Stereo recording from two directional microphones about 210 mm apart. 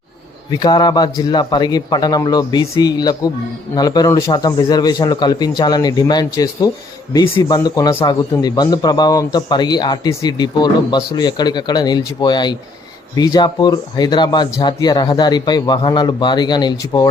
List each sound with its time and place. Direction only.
0.5 s a man's voice: 20° left (ahead or behind)